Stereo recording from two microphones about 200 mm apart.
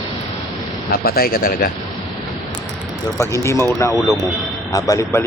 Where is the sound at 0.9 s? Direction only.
50° left (ahead or behind).